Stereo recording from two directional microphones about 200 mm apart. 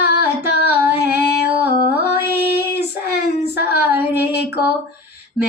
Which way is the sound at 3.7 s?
10° right (ahead or behind).